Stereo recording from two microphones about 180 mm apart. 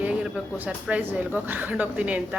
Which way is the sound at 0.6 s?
10° right (ahead or behind).